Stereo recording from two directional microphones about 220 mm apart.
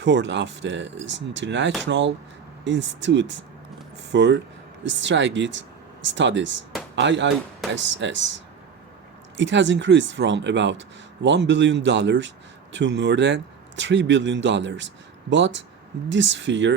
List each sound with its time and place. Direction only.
0.0 s speech: 55° right (ahead or behind)
9.4 s speech: 55° right (ahead or behind)